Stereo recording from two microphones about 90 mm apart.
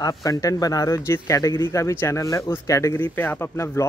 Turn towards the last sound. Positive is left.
turn(degrees=30)  # may be behind; listen again after turning